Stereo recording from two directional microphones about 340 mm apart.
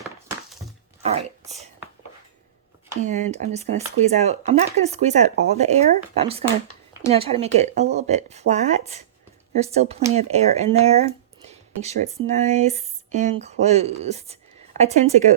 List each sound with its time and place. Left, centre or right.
1.0 s speech: centre
3.0 s speech: right